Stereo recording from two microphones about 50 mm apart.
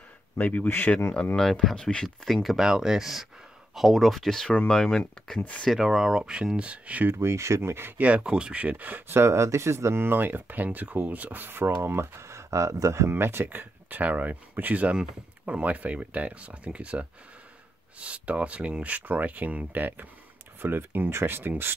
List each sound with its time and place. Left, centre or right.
0.4 s speech: left
0.7 s speech: left
1.3 s speech: centre
1.8 s speech: centre
2.0 s speech: centre
5.7 s speech: centre; by 7.1 s right
7.1 s speech: right
8.0 s speech: right
9.1 s speech: right
11.7 s speech: right
13.1 s speech: right
21.1 s speech: right